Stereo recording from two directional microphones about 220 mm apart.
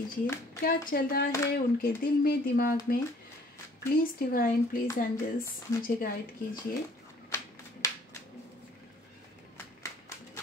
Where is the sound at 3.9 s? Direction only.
40° left (ahead or behind).